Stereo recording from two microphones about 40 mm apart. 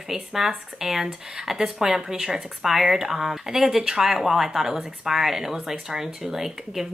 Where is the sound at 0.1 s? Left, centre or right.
Centre.